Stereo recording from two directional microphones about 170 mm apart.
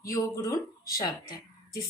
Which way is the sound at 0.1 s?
20° left (ahead or behind).